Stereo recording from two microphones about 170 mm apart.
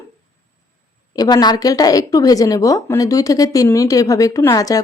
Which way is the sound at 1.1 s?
20° left (ahead or behind).